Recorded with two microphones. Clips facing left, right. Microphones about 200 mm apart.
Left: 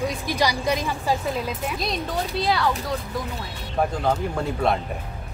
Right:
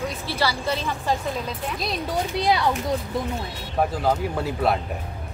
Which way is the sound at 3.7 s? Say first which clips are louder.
Even; 5° right (ahead or behind).